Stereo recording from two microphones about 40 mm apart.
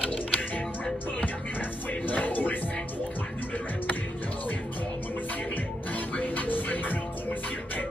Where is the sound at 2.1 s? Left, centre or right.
Left.